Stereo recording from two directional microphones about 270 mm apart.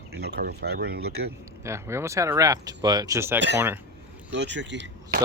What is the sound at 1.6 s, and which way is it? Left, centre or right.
Speech, centre.